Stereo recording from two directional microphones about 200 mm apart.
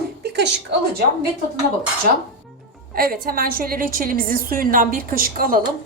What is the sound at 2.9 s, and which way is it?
Speech, 45° right (ahead or behind).